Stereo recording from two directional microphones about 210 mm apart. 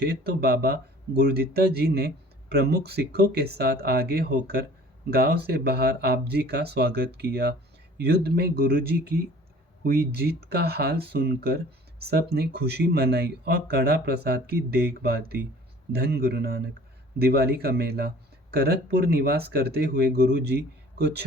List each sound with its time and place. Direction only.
0.0 s speech: 50° right (ahead or behind)